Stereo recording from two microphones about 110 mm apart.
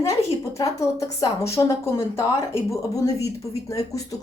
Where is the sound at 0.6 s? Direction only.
30° left (ahead or behind).